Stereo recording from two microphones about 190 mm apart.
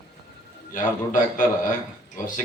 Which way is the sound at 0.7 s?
45° left (ahead or behind).